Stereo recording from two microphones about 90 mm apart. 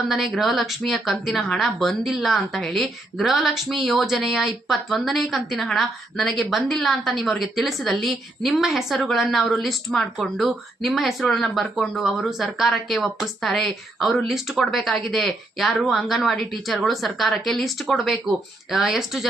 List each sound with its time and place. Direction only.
0.1 s a woman's voice: centre (ahead or behind)